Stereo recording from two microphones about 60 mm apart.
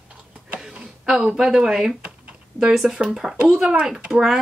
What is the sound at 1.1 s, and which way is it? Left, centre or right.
Speech, centre.